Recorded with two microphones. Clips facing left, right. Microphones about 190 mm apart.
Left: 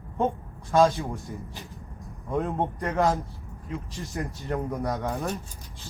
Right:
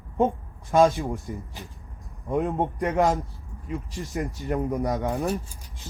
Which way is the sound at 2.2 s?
15° right (ahead or behind).